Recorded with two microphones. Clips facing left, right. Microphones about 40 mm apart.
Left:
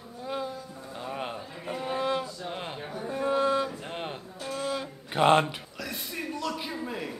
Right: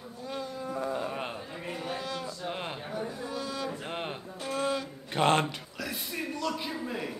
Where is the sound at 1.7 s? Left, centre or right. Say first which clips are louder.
Left 8 dB; left.